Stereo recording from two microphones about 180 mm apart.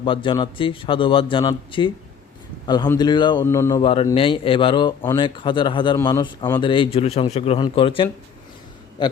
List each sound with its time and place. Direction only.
0.0 s speech: 30° left (ahead or behind)
4.1 s speech: 30° left (ahead or behind)